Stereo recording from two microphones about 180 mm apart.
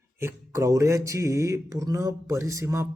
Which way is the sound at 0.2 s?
15° right (ahead or behind).